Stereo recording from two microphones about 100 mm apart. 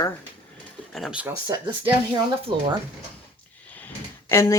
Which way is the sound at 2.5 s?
60° right (ahead or behind).